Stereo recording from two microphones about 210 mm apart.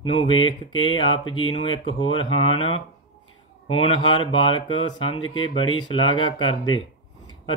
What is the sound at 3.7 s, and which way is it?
Speech, 25° left (ahead or behind).